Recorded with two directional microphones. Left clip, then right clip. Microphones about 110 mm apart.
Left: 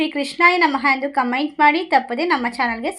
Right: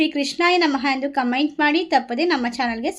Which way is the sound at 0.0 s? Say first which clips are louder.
Left 4 dB; 25° right (ahead or behind).